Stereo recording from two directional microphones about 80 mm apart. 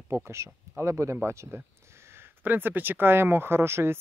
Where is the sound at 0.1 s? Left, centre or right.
Right.